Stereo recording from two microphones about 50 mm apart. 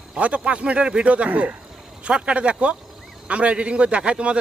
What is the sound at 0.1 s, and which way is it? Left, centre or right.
A man's voice, right.